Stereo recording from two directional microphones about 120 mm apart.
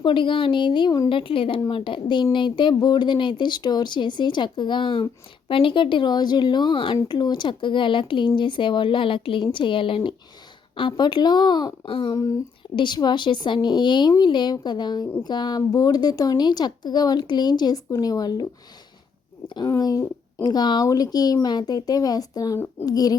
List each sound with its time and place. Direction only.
0.0 s speech: 45° left (ahead or behind)
19.6 s speech: 30° left (ahead or behind)